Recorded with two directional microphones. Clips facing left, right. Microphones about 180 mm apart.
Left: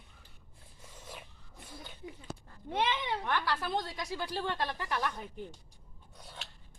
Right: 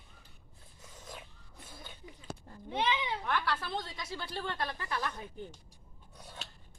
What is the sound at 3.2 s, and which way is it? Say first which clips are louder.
A woman's voice: left 1 dB; 15° left (ahead or behind).